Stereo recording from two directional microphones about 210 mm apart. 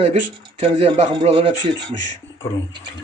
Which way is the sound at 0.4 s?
25° right (ahead or behind).